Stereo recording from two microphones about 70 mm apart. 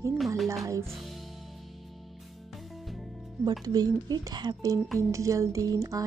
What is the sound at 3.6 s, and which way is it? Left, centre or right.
Speech, right.